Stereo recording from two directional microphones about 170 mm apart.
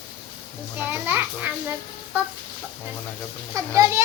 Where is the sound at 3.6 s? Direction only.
20° right (ahead or behind).